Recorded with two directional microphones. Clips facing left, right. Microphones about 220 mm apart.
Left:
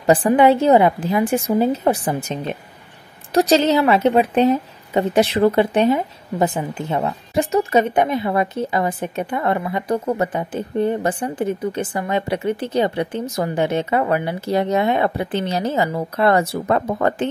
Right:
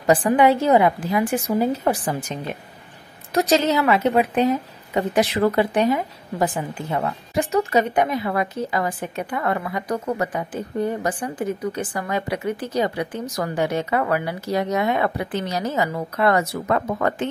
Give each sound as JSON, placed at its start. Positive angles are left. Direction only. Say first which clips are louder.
{"t": 0.0, "sound": "a woman's voice", "louder": "left 3 dB", "side_deg": 25}